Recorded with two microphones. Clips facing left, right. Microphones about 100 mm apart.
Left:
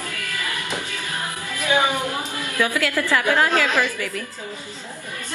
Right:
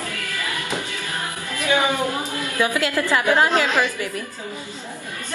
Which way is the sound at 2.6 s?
20° right (ahead or behind).